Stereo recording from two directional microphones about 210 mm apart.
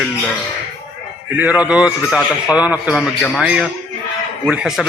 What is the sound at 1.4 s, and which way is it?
A man's voice, 5° right (ahead or behind).